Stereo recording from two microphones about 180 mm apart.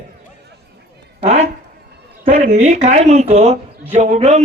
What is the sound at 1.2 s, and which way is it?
A man's voice, 40° right (ahead or behind).